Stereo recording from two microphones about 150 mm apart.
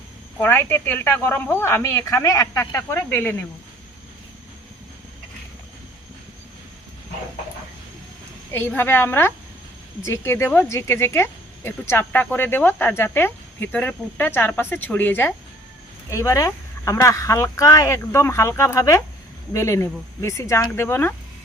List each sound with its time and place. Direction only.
0.3 s speech: 15° left (ahead or behind)
8.5 s speech: 15° left (ahead or behind)